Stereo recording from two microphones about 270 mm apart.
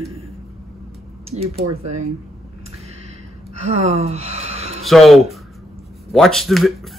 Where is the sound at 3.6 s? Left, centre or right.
Right.